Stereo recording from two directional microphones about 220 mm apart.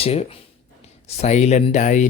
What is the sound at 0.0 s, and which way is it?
Speech, 25° left (ahead or behind).